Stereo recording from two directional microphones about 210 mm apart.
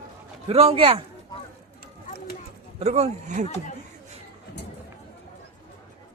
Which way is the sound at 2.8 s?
30° right (ahead or behind).